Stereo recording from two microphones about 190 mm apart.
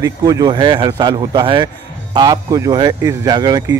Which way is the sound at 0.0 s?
20° right (ahead or behind).